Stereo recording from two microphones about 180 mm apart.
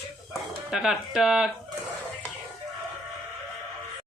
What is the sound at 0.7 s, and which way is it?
Speech, 5° right (ahead or behind).